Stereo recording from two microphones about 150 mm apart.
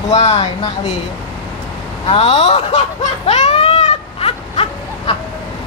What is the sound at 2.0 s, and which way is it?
Speech, 40° left (ahead or behind).